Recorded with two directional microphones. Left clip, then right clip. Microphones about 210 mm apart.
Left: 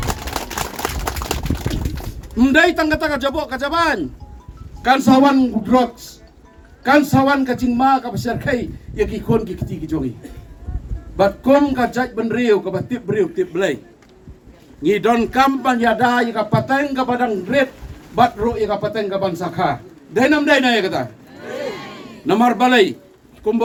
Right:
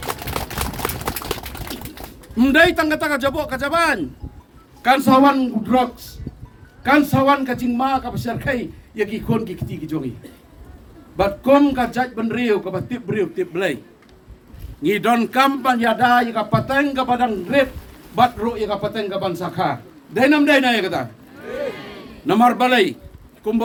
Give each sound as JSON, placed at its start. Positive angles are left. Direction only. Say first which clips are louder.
{"t": 2.3, "sound": "a man's voice", "louder": "even", "side_deg": -5}
{"t": 6.8, "sound": "a man's voice", "louder": "left 1 dB", "side_deg": 0}
{"t": 11.2, "sound": "a man's voice", "louder": "left 1 dB", "side_deg": 0}
{"t": 14.8, "sound": "a man's voice", "louder": "left 2 dB", "side_deg": -5}
{"t": 22.3, "sound": "a man's voice", "louder": "left 1 dB", "side_deg": -5}